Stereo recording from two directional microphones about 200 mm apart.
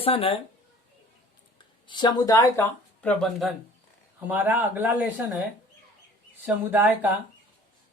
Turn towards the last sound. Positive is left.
turn(degrees=-10)  # may be behind; listen again after turning